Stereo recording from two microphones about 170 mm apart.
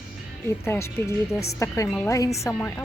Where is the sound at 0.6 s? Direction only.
15° left (ahead or behind).